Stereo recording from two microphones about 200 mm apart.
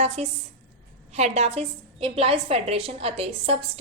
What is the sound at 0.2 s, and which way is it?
A woman's voice, 35° right (ahead or behind).